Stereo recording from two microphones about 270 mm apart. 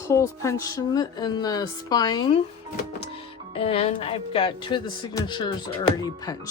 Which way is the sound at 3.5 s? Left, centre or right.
Left.